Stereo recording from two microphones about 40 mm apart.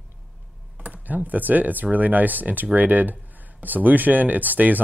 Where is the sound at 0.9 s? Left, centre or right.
Right.